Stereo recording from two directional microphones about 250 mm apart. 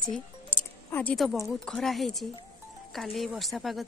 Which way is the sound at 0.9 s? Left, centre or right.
Centre.